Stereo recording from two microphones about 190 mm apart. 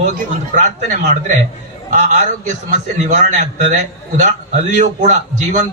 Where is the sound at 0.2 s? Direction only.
40° right (ahead or behind).